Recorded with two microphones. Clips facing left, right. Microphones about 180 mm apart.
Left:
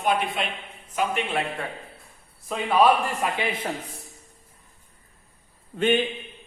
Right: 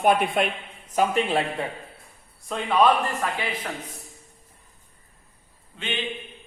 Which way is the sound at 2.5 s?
5° left (ahead or behind).